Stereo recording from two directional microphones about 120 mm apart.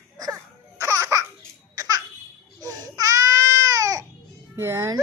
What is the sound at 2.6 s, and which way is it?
Baby cry, 30° right (ahead or behind).